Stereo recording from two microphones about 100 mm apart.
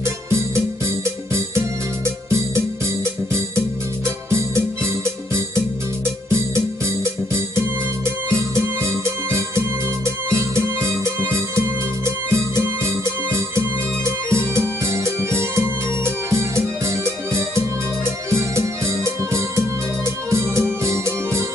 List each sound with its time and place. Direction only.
0.8 s music: 25° right (ahead or behind)
4.0 s music: 25° right (ahead or behind)
7.3 s music: 25° right (ahead or behind)